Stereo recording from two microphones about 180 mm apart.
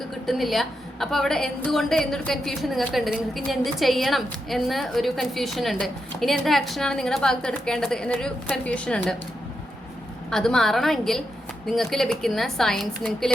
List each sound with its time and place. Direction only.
0.3 s a woman's voice: centre (ahead or behind)
10.2 s a woman's voice: 5° left (ahead or behind)